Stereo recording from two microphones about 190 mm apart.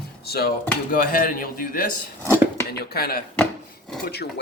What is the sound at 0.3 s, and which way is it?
A man's voice, 55° left (ahead or behind).